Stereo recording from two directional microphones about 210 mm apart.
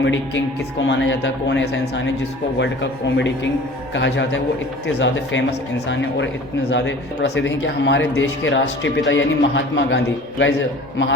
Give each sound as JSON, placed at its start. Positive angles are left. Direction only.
{"t": 0.0, "sound": "speech", "side_deg": 60}
{"t": 3.2, "sound": "speech", "side_deg": 60}